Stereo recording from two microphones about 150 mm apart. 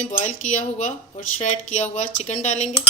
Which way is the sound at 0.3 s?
55° left (ahead or behind).